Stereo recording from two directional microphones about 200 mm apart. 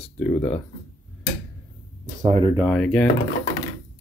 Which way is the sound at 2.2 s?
30° right (ahead or behind).